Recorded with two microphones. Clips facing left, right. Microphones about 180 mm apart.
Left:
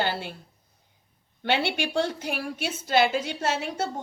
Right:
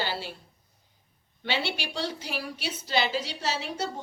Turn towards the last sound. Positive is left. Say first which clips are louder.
# left 3 dB
turn(degrees=50)  # may be behind; listen again after turning